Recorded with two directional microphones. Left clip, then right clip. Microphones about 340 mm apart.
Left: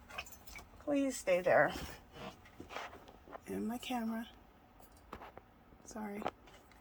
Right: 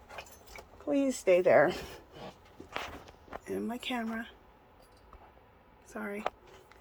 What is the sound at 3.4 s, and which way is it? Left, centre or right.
Speech, centre.